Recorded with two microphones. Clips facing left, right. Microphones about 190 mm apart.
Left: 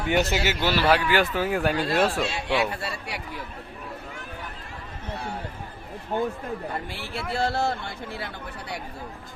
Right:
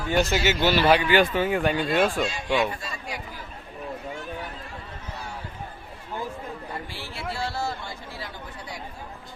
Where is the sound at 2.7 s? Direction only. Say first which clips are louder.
Left 2 dB; 70° left (ahead or behind).